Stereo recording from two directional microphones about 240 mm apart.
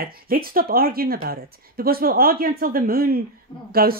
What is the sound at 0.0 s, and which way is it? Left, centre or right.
Speech, right.